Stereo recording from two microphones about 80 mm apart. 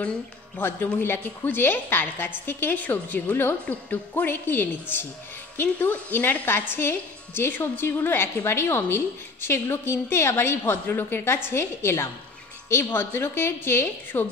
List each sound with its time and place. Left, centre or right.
0.6 s a woman's voice: left